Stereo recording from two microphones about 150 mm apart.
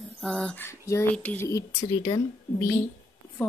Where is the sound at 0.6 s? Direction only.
20° left (ahead or behind).